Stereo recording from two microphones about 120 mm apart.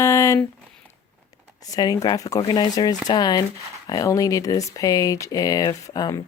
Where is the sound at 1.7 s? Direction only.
30° left (ahead or behind).